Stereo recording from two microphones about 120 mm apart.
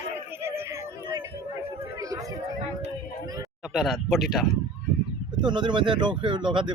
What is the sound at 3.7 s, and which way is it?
Speech, centre (ahead or behind).